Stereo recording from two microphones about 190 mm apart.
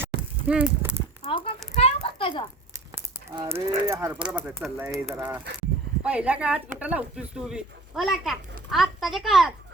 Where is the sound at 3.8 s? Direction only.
15° right (ahead or behind).